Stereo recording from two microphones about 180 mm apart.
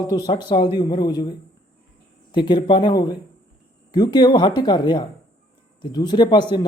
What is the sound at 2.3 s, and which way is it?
Speech, 25° left (ahead or behind).